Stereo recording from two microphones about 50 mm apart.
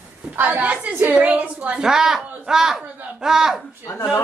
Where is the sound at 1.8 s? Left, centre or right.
Centre.